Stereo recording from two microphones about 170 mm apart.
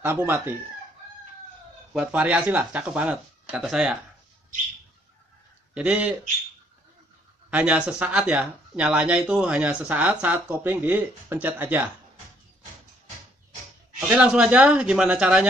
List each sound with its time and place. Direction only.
0.0 s speech: 15° right (ahead or behind)
2.0 s speech: 10° right (ahead or behind)
5.8 s speech: 5° right (ahead or behind)
7.5 s speech: 5° right (ahead or behind)
13.9 s speech: 10° right (ahead or behind)